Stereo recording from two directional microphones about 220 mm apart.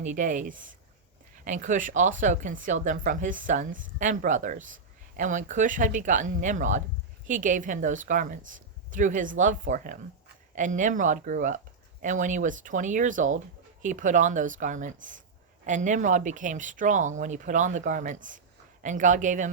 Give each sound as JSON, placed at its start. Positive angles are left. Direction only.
{"t": 0.0, "sound": "speech", "side_deg": -35}